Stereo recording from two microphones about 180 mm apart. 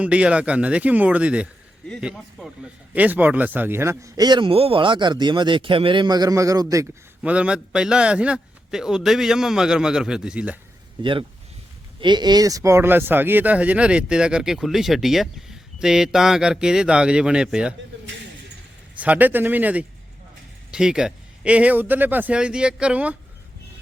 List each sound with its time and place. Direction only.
0.0 s speech: 5° right (ahead or behind)
7.2 s speech: 5° right (ahead or behind)
11.0 s speech: 30° right (ahead or behind); by 17.7 s 5° right (ahead or behind)
18.9 s speech: 10° right (ahead or behind)